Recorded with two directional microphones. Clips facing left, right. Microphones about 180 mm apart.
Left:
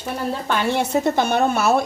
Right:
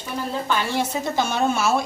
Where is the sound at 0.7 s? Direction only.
60° left (ahead or behind).